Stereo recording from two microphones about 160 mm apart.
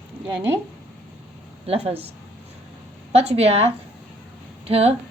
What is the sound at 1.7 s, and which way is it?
Speech, 40° right (ahead or behind).